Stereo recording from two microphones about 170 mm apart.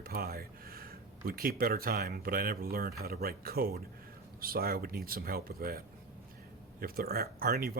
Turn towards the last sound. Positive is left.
turn(degrees=-65)  # may be behind; listen again after turning